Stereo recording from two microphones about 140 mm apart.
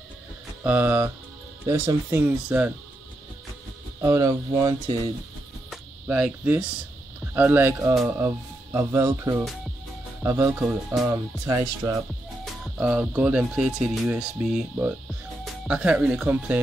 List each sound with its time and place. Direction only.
0.7 s speech: 15° right (ahead or behind)
4.0 s speech: 20° right (ahead or behind)
6.0 s speech: 10° right (ahead or behind)
12.7 s speech: 5° right (ahead or behind)